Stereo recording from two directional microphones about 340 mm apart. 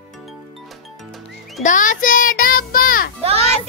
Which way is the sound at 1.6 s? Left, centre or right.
Left.